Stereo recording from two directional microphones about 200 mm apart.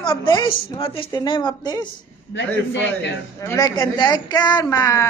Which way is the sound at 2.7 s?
65° left (ahead or behind).